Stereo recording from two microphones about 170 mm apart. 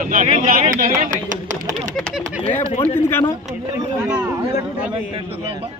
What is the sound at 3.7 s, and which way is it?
Speech, 10° right (ahead or behind).